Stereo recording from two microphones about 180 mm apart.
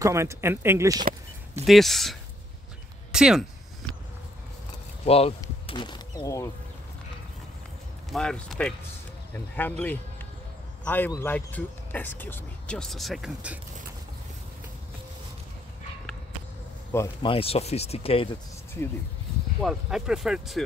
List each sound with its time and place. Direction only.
0.0 s speech: 15° right (ahead or behind)
1.7 s speech: centre (ahead or behind)
3.1 s a sound: 5° right (ahead or behind)
5.0 s speech: 35° left (ahead or behind); by 6.5 s 15° left (ahead or behind)
8.1 s speech: 5° left (ahead or behind)
16.9 s speech: 15° left (ahead or behind)
17.3 s speech: 30° left (ahead or behind)
19.6 s speech: centre (ahead or behind)